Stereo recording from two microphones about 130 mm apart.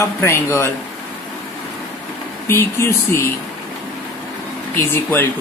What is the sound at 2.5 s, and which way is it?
Speech, 20° left (ahead or behind).